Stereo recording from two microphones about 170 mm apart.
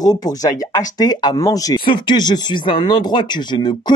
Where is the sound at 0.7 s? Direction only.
25° left (ahead or behind).